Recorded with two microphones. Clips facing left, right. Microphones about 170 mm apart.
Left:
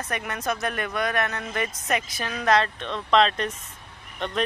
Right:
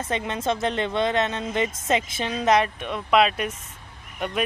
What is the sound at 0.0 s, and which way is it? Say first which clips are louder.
Speech: right 3 dB; 25° right (ahead or behind).